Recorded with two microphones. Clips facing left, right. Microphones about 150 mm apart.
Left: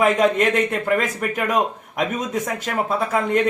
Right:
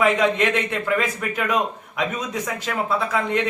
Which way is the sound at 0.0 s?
45° left (ahead or behind).